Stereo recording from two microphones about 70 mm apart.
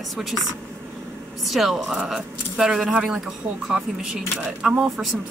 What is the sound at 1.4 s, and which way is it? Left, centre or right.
Speech, centre.